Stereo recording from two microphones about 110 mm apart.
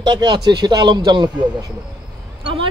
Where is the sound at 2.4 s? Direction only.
50° right (ahead or behind).